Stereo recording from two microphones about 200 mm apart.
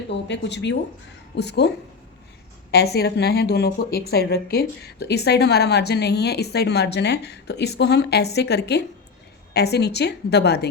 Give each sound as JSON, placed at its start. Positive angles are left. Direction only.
{"t": 0.3, "sound": "a woman's voice", "side_deg": 60}
{"t": 2.7, "sound": "a woman's voice", "side_deg": 55}